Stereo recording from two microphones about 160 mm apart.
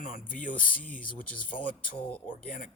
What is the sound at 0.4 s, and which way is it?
Speech, 55° left (ahead or behind).